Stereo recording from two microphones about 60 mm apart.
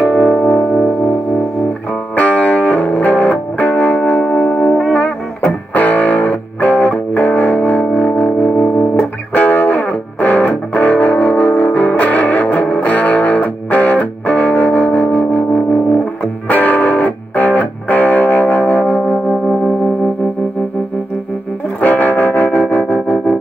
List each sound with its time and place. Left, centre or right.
0.0 s music: left
2.1 s music: left
21.8 s music: left